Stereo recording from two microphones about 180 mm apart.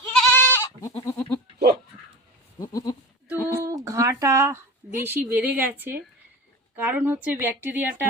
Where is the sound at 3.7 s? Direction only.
20° right (ahead or behind).